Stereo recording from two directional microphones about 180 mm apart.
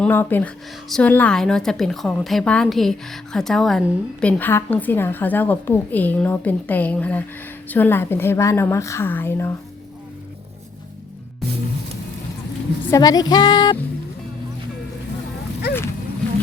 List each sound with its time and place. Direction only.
0.0 s a woman's voice: 10° left (ahead or behind)
12.9 s music: 20° left (ahead or behind)